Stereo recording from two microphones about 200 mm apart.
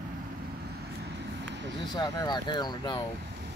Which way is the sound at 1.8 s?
20° left (ahead or behind).